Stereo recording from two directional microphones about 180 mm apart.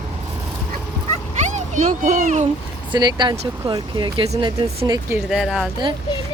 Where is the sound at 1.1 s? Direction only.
40° right (ahead or behind).